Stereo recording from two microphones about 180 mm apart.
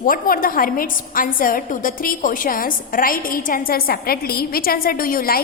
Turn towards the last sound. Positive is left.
turn(degrees=55)  # may be behind; listen again after turning